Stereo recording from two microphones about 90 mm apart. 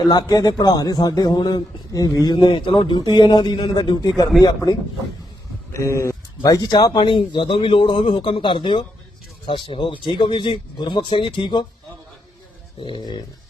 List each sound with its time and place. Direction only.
0.1 s a man's voice: 45° left (ahead or behind)
5.7 s a man's voice: 35° left (ahead or behind); by 11.6 s 60° left (ahead or behind)